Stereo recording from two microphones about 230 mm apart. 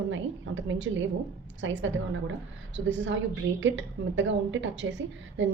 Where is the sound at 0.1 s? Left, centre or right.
Right.